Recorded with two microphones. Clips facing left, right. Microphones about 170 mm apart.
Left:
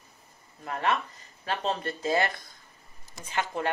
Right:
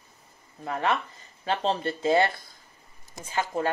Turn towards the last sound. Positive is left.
turn(degrees=-25)  # may be behind; listen again after turning